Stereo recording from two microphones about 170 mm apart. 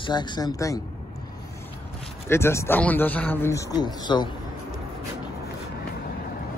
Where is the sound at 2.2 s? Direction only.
15° left (ahead or behind).